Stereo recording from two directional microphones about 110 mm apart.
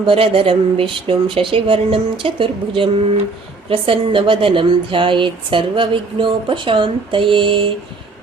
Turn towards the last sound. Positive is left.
turn(degrees=-50)  # may be behind; listen again after turning